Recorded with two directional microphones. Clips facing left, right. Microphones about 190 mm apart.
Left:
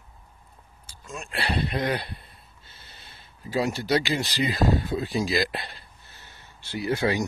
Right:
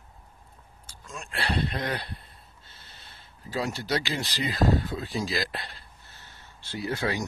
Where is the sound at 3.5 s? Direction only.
10° left (ahead or behind).